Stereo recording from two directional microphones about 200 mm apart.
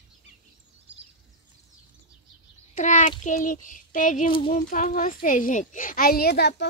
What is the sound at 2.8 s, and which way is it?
A child's voice, 40° left (ahead or behind).